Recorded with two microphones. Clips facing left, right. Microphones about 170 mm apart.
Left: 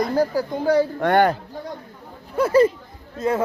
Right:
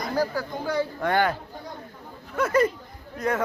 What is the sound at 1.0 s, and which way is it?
Speech, 55° left (ahead or behind).